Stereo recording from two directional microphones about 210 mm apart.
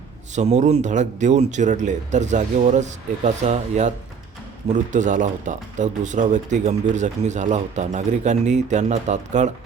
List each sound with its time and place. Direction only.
0.3 s speech: 35° right (ahead or behind)